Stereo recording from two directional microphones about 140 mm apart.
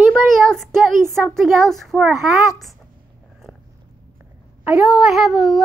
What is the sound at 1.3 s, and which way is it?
Child singing, centre (ahead or behind).